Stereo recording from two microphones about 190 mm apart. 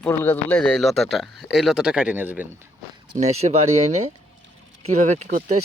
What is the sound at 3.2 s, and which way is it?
Speech, 35° right (ahead or behind).